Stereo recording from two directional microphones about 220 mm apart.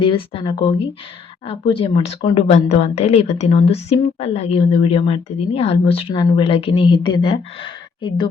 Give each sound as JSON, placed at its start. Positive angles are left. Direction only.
{"t": 0.0, "sound": "a woman's voice", "side_deg": 25}